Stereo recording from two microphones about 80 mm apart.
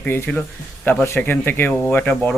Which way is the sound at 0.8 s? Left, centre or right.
Left.